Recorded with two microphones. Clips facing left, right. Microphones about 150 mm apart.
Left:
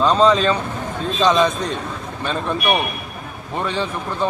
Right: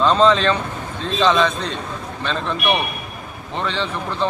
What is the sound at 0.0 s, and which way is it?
A man's voice, 10° left (ahead or behind).